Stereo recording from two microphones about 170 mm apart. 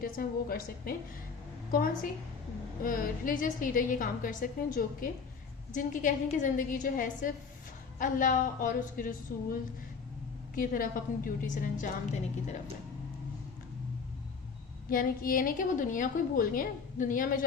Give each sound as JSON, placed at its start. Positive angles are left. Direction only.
{"t": 0.0, "sound": "a woman's voice", "side_deg": 60}
{"t": 2.8, "sound": "a woman's voice", "side_deg": 55}
{"t": 14.8, "sound": "a woman's voice", "side_deg": 55}